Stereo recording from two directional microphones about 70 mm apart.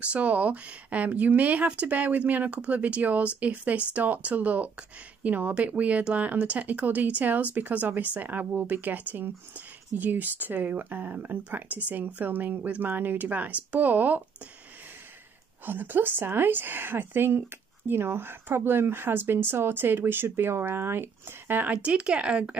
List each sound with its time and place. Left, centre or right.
0.0 s speech: centre
15.6 s speech: right
21.8 s speech: centre